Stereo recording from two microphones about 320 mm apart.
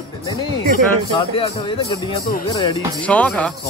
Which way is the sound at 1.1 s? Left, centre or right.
Centre.